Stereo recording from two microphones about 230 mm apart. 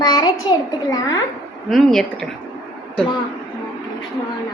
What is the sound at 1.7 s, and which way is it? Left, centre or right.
Speech, centre.